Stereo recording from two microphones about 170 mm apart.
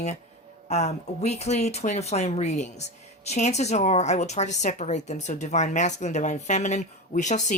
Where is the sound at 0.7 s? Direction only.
40° left (ahead or behind).